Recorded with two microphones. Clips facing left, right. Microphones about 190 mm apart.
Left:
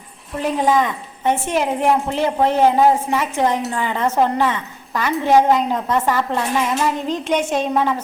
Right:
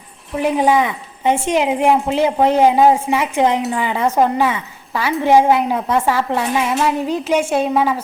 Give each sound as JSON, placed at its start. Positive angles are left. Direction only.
{"t": 0.3, "sound": "a woman's voice", "side_deg": -15}